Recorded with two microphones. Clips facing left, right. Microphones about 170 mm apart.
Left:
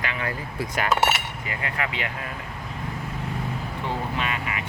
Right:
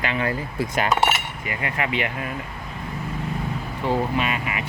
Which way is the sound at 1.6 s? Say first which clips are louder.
Right 5 dB; 20° right (ahead or behind).